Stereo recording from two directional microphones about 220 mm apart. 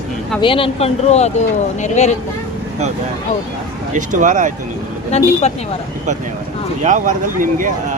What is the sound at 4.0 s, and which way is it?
Speech, 35° right (ahead or behind).